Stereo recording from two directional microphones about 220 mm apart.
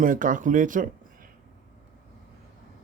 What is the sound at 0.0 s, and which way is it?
Speech, 35° right (ahead or behind).